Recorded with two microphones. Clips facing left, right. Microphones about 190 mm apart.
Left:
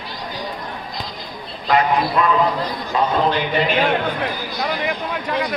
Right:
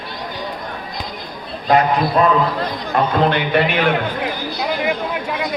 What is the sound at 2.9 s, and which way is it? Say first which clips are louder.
Speech: right 2 dB; 65° right (ahead or behind).